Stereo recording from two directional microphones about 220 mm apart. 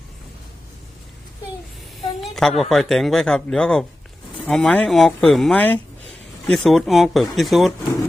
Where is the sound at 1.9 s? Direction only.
Centre (ahead or behind).